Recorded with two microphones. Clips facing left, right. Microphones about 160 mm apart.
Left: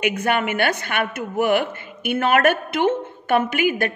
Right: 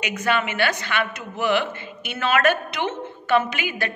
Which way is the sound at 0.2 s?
55° left (ahead or behind).